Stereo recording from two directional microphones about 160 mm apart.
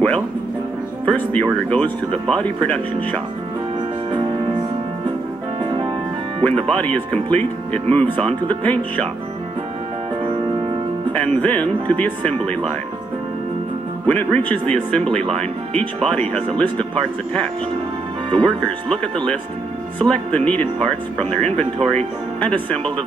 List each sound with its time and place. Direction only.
1.0 s speech: 10° left (ahead or behind)
6.7 s speech: 10° left (ahead or behind)
11.1 s speech: 10° left (ahead or behind)
14.0 s speech: 10° left (ahead or behind)